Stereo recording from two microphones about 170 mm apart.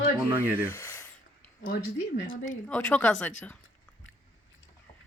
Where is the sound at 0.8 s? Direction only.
20° left (ahead or behind).